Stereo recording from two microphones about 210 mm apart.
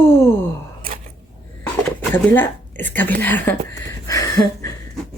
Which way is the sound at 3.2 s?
10° left (ahead or behind).